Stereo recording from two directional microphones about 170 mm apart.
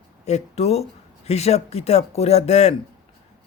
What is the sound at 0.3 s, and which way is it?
A man's voice, 40° left (ahead or behind).